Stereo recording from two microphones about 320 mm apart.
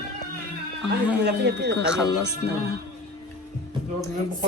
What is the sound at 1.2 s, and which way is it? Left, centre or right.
Speech, right.